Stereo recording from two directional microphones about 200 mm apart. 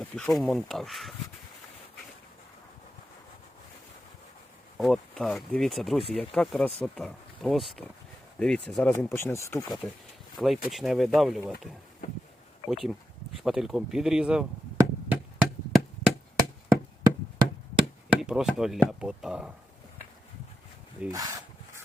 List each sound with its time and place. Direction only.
0.0 s speech: centre (ahead or behind)
4.8 s speech: centre (ahead or behind)
9.6 s speech: centre (ahead or behind)
12.6 s speech: centre (ahead or behind)
14.8 s a sound: 5° right (ahead or behind)
18.1 s speech: 5° right (ahead or behind)
21.0 s rub: 15° right (ahead or behind)